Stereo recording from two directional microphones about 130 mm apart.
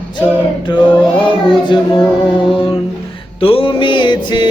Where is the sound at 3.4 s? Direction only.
45° left (ahead or behind).